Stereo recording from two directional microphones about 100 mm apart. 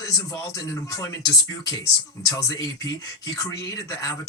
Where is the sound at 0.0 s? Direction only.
35° left (ahead or behind).